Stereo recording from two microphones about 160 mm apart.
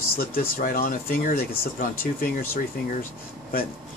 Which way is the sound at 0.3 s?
65° left (ahead or behind).